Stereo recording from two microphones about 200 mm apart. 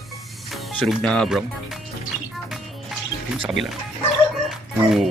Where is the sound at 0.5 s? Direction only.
Centre (ahead or behind).